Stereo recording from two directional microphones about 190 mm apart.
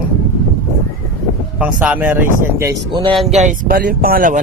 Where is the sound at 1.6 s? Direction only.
5° right (ahead or behind).